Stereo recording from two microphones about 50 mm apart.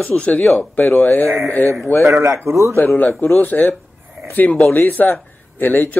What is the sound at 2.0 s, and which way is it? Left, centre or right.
Speech, right.